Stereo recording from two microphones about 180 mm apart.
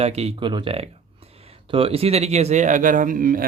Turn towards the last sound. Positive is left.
turn(degrees=-50)  # may be behind; listen again after turning